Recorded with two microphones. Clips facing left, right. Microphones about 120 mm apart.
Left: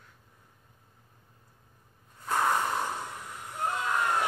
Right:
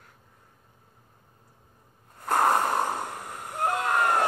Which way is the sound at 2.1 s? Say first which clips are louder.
Right 5 dB; 55° right (ahead or behind).